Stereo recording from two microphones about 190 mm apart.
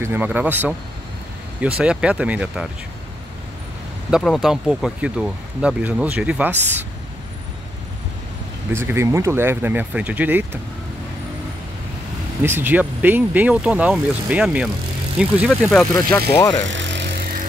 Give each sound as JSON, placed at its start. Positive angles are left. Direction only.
{"t": 0.0, "sound": "speech", "side_deg": -10}
{"t": 1.8, "sound": "speech", "side_deg": -5}
{"t": 4.1, "sound": "speech", "side_deg": 0}
{"t": 8.7, "sound": "speech", "side_deg": -15}
{"t": 12.4, "sound": "speech", "side_deg": -10}
{"t": 16.6, "sound": "music", "side_deg": -75}